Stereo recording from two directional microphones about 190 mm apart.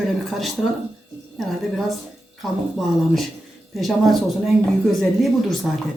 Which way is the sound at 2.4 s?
Centre (ahead or behind).